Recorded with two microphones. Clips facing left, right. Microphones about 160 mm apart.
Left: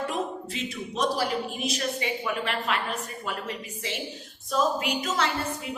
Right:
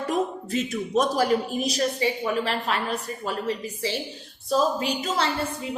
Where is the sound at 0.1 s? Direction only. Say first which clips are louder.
Right 5 dB; 45° right (ahead or behind).